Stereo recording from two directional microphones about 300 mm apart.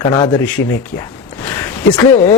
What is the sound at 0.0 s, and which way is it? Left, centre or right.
Speech, centre.